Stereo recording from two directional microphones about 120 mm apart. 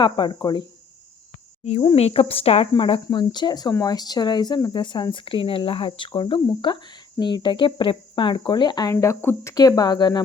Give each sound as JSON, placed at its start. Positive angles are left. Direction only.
{"t": 0.0, "sound": "speech", "side_deg": 40}
{"t": 2.0, "sound": "speech", "side_deg": 60}